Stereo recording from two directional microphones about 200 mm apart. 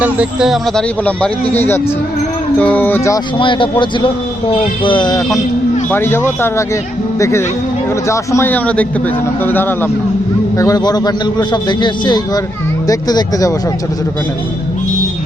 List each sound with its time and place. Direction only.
0.0 s a man's voice: 5° right (ahead or behind); by 3.2 s 10° left (ahead or behind)
3.3 s a man's voice: 25° left (ahead or behind)
5.9 s a man's voice: 10° left (ahead or behind)